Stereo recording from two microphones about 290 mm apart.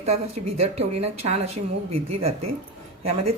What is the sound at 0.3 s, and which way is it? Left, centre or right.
Speech, right.